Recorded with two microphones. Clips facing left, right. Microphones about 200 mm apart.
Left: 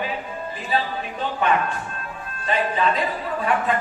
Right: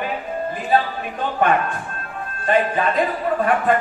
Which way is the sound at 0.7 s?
50° right (ahead or behind).